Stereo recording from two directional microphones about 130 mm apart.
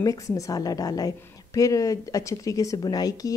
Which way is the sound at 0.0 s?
25° left (ahead or behind).